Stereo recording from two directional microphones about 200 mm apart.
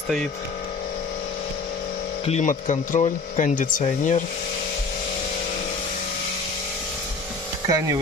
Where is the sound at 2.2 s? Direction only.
35° left (ahead or behind).